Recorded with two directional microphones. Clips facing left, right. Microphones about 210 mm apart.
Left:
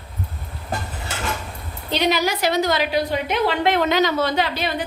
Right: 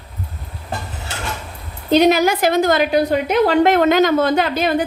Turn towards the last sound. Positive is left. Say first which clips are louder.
# right 6 dB
turn(degrees=-50)  # may be behind; listen again after turning